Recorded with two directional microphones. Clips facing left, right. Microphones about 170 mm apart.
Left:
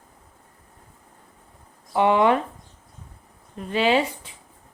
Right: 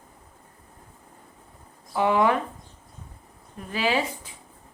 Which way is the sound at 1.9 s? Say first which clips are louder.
Left 3 dB; 25° left (ahead or behind).